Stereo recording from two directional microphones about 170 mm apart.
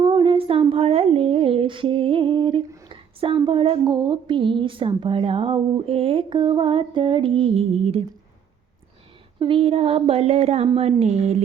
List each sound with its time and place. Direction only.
0.0 s speech: 30° right (ahead or behind)
9.4 s speech: 35° right (ahead or behind)